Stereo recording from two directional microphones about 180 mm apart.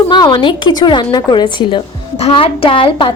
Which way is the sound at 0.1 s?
25° left (ahead or behind).